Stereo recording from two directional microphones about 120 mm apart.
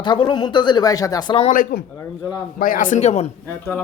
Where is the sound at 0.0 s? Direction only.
40° left (ahead or behind).